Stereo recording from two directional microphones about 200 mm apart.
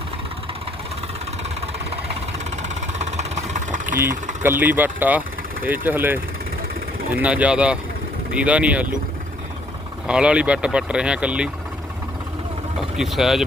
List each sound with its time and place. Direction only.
2.6 s vehicle: 35° right (ahead or behind)
4.4 s speech: 10° right (ahead or behind)
10.1 s speech: 5° right (ahead or behind)
13.0 s speech: centre (ahead or behind)